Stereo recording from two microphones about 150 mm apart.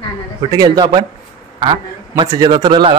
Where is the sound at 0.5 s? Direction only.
25° right (ahead or behind).